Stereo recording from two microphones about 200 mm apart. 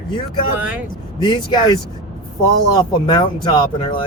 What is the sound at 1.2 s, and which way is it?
Speech, 20° left (ahead or behind).